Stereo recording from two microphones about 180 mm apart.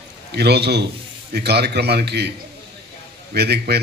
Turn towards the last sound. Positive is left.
turn(degrees=-65)  # may be behind; listen again after turning